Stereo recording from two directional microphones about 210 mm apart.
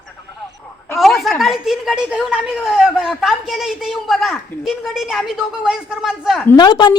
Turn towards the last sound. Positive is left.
turn(degrees=20)  # may be behind; listen again after turning